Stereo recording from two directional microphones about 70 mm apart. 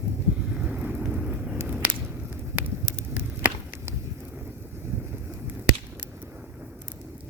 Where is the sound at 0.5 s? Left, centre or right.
Centre.